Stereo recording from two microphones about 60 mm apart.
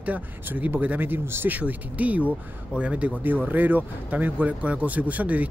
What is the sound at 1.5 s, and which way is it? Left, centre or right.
Speech, right.